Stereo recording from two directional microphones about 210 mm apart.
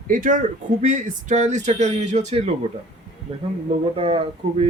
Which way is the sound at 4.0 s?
25° right (ahead or behind).